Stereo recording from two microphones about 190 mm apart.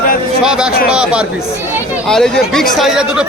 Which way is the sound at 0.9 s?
5° right (ahead or behind).